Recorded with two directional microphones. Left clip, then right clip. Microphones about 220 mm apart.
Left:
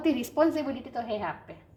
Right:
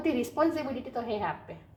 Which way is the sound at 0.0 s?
40° left (ahead or behind).